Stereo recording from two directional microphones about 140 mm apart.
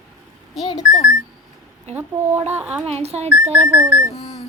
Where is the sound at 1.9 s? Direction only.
15° right (ahead or behind).